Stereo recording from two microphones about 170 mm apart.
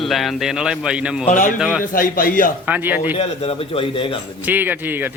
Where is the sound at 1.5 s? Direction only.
5° right (ahead or behind).